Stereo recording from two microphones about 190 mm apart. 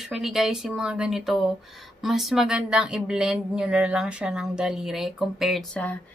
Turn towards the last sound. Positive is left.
turn(degrees=5)  # may be behind; listen again after turning